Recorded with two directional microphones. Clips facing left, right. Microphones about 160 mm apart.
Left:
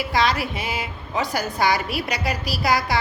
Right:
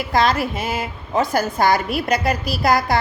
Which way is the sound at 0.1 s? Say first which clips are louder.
Right 5 dB; 50° right (ahead or behind).